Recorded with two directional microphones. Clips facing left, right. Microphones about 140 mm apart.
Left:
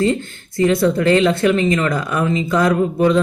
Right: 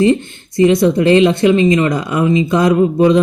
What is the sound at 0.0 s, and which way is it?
Speech, 20° right (ahead or behind).